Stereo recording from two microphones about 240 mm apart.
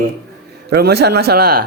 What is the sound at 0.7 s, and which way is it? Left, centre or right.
Speech, right.